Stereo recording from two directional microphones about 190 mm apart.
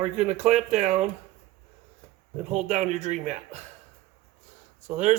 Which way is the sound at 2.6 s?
40° right (ahead or behind).